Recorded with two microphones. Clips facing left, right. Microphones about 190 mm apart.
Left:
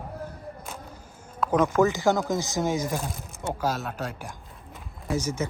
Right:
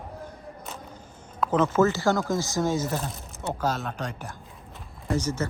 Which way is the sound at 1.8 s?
15° left (ahead or behind).